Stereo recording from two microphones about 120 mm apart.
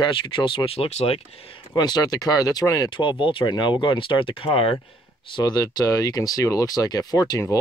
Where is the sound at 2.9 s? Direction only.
40° left (ahead or behind).